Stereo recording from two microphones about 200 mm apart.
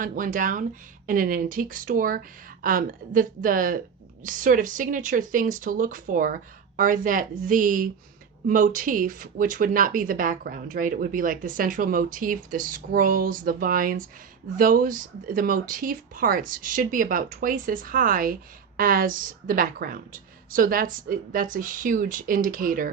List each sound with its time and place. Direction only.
0.0 s speech: 40° right (ahead or behind)